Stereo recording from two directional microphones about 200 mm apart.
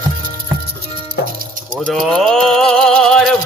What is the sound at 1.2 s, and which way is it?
Music, 55° left (ahead or behind).